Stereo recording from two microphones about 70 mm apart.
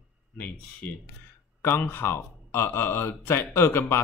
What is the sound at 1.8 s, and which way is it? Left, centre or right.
Speech, left.